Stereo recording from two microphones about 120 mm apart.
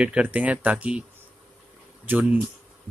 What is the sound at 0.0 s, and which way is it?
Speech, 10° right (ahead or behind).